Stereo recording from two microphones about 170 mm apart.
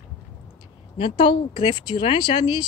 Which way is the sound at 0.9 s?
30° left (ahead or behind).